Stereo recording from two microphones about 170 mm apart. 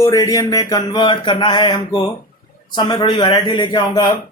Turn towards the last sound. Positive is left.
turn(degrees=25)  # may be behind; listen again after turning